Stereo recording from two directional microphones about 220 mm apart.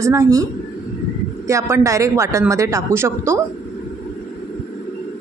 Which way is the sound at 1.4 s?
15° right (ahead or behind).